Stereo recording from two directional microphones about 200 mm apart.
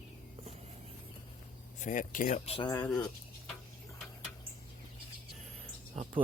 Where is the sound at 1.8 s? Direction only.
40° left (ahead or behind); by 2.8 s 25° left (ahead or behind).